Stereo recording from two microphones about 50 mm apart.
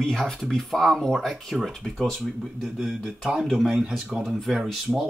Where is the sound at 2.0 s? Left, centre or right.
Centre.